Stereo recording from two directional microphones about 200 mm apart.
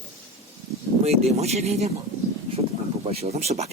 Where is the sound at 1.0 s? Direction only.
30° right (ahead or behind).